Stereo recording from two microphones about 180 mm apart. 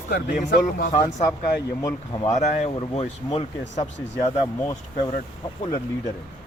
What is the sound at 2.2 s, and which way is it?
Speech, 35° left (ahead or behind).